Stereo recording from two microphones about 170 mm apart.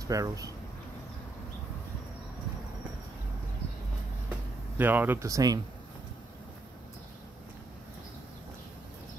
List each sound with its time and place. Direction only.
0.0 s speech: 20° right (ahead or behind)
4.7 s speech: 10° right (ahead or behind)